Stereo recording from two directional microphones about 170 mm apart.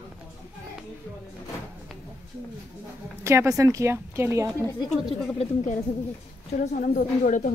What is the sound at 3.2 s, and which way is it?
Speech, 15° right (ahead or behind).